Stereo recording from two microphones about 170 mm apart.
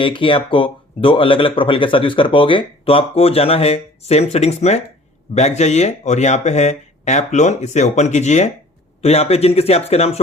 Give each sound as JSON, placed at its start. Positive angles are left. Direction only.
{"t": 0.0, "sound": "speech", "side_deg": 30}